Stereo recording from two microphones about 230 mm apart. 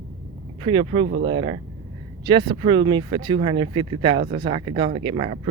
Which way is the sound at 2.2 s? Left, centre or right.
Right.